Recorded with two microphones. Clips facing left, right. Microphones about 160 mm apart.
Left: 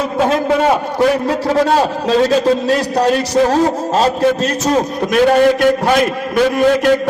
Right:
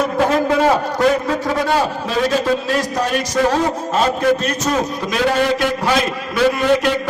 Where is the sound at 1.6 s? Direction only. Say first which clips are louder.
Left 4 dB; 40° left (ahead or behind).